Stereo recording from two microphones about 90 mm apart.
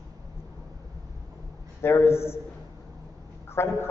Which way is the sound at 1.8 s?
30° left (ahead or behind).